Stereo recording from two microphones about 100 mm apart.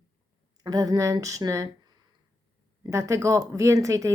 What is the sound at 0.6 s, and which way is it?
A woman's voice, 40° right (ahead or behind).